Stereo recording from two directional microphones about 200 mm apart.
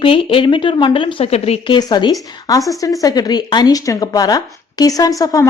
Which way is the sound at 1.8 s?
20° left (ahead or behind).